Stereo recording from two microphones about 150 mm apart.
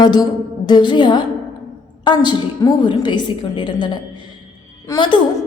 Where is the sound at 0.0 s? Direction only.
30° left (ahead or behind).